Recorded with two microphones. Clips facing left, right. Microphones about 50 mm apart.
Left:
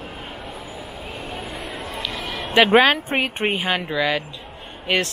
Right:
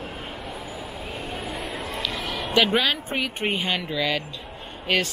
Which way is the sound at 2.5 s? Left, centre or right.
Left.